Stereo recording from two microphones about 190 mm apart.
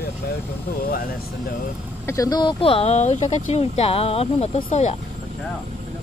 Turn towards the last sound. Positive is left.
turn(degrees=35)  # may be behind; listen again after turning